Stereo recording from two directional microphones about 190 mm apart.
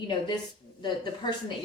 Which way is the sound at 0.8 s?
25° left (ahead or behind).